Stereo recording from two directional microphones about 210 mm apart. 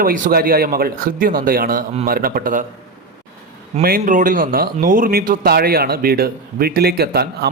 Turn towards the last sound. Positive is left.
turn(degrees=-50)  # may be behind; listen again after turning